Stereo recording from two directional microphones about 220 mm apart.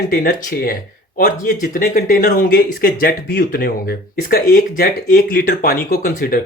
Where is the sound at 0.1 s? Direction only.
45° left (ahead or behind).